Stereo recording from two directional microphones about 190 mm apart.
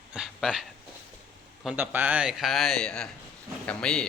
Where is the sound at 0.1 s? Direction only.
5° right (ahead or behind).